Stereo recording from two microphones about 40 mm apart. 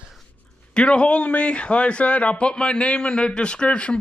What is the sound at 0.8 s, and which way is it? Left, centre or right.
Speech, left.